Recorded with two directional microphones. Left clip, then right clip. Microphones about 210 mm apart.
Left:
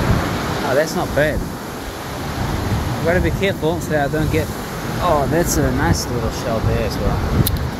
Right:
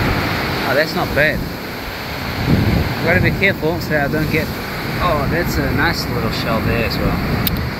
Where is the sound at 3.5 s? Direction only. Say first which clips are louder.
Right 2 dB; 10° left (ahead or behind).